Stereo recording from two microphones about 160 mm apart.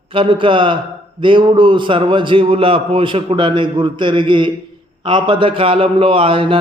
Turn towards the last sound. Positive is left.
turn(degrees=-35)  # may be behind; listen again after turning